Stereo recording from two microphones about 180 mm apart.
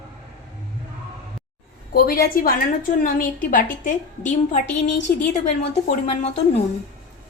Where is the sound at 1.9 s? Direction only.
55° left (ahead or behind).